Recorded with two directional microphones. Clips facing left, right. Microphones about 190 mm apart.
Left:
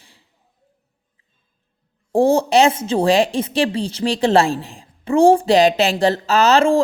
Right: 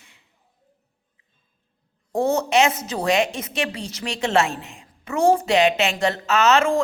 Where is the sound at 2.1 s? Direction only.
30° left (ahead or behind).